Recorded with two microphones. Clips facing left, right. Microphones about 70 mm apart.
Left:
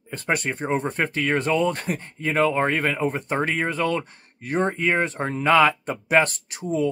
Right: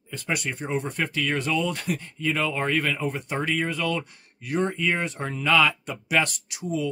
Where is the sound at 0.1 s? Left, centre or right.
Left.